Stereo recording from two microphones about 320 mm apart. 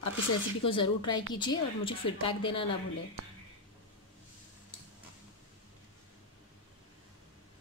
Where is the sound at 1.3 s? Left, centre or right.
Centre.